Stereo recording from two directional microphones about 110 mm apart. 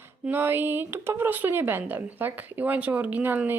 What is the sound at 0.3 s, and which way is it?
Speech, 20° right (ahead or behind).